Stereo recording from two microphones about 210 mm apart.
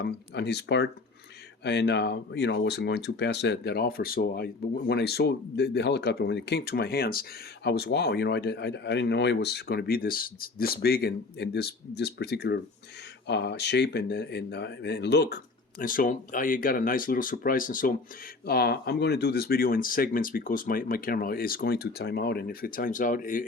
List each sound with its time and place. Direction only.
0.0 s speech: 55° left (ahead or behind)